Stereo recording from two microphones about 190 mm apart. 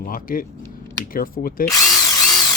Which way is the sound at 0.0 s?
45° left (ahead or behind).